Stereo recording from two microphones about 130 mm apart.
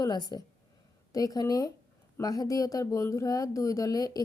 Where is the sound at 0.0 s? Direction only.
30° left (ahead or behind).